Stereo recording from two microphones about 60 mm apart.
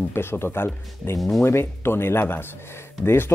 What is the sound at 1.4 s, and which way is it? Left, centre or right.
Speech, left.